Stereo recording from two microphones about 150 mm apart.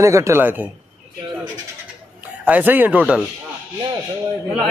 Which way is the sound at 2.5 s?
10° right (ahead or behind).